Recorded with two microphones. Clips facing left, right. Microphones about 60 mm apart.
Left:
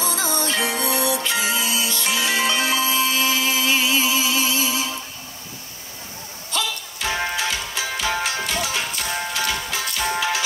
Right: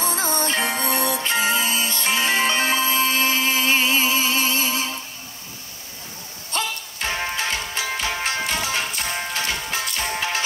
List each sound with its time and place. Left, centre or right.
0.0 s music: right
6.5 s music: right